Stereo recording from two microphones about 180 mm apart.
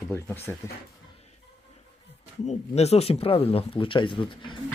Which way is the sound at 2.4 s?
35° left (ahead or behind).